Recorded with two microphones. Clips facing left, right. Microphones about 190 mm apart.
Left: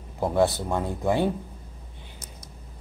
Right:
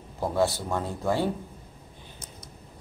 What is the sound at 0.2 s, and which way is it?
Speech, 20° left (ahead or behind).